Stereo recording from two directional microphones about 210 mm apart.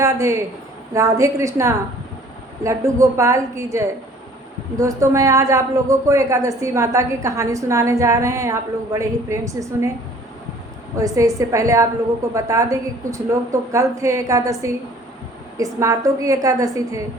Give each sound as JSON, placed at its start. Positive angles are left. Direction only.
{"t": 0.0, "sound": "a woman's voice", "side_deg": -15}
{"t": 10.9, "sound": "a woman's voice", "side_deg": -15}